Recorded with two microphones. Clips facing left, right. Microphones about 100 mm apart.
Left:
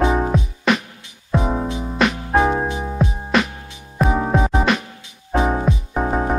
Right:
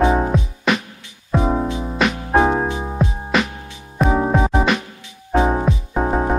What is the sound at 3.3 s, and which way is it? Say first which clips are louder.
Music: left 1 dB; centre (ahead or behind).